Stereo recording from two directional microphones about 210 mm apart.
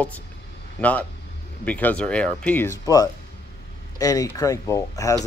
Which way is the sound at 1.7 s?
5° left (ahead or behind).